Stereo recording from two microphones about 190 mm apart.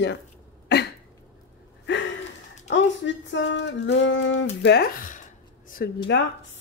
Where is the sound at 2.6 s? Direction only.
75° left (ahead or behind).